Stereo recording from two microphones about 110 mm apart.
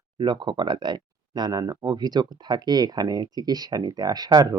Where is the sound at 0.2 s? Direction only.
45° right (ahead or behind).